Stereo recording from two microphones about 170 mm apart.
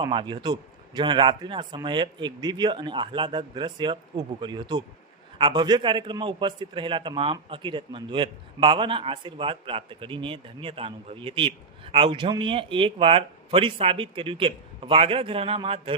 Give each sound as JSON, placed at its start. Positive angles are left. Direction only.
{"t": 0.0, "sound": "a man's voice", "side_deg": -30}